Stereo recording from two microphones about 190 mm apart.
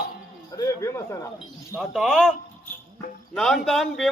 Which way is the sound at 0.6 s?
15° left (ahead or behind).